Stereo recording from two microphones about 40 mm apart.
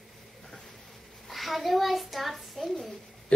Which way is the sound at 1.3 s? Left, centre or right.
Centre.